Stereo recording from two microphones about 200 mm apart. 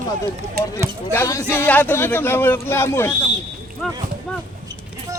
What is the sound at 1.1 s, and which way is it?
Speech, 15° left (ahead or behind).